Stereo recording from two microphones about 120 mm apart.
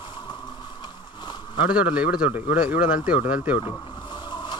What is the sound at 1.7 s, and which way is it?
A man's voice, 10° right (ahead or behind).